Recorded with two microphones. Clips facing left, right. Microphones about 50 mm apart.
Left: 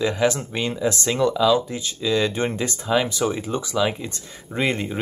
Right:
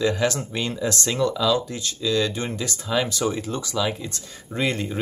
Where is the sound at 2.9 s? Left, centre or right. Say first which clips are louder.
Left 1 dB; centre.